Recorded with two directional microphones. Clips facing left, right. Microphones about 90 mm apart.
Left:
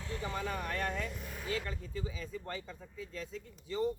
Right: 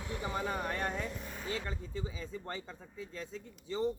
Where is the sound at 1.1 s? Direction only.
Centre (ahead or behind).